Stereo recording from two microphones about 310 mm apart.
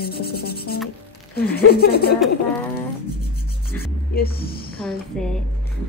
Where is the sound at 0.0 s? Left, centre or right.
Left.